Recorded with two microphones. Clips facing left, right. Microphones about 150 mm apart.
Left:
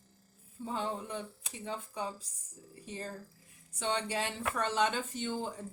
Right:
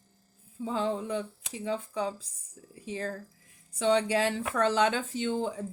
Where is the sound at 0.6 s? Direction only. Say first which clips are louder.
Right 6 dB; 90° right.